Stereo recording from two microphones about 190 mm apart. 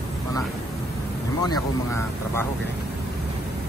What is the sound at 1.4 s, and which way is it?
Vehicle, 15° left (ahead or behind).